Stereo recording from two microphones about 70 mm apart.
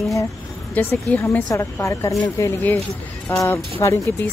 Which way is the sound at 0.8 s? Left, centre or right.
Left.